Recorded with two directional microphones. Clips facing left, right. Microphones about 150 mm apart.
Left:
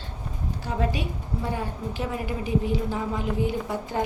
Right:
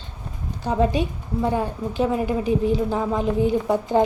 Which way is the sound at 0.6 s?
25° right (ahead or behind).